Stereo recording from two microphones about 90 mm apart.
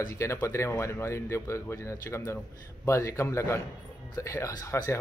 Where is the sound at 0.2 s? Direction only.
30° left (ahead or behind).